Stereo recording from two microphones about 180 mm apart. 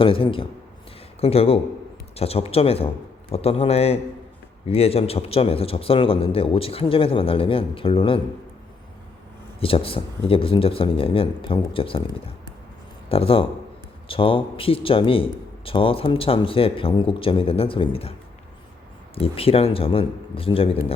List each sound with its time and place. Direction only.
0.0 s a man's voice: 30° left (ahead or behind)
9.6 s a man's voice: 30° left (ahead or behind)
19.1 s a man's voice: 30° left (ahead or behind)